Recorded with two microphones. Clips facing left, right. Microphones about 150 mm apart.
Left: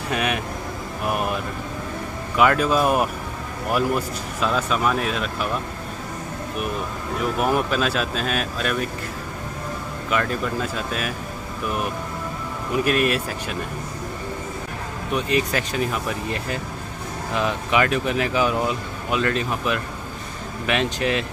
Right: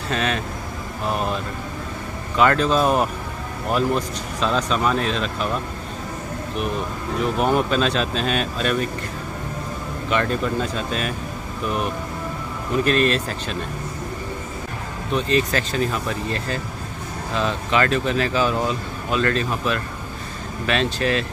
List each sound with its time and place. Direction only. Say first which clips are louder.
0.1 s speech: right 1 dB; 15° left (ahead or behind)
7.3 s speech: right 2 dB; 5° left (ahead or behind)
10.0 s speech: right 2 dB; 5° left (ahead or behind)
12.7 s speech: right 2 dB; 10° left (ahead or behind)
15.1 s speech: right 2 dB; 15° left (ahead or behind)